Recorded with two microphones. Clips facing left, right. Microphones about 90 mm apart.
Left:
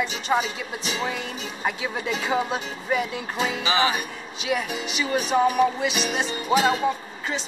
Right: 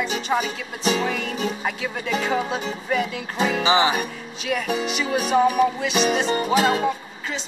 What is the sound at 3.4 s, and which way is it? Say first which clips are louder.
Music: right 5 dB; 60° right (ahead or behind).